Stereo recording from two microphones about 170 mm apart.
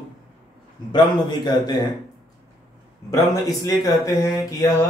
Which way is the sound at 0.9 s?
25° left (ahead or behind).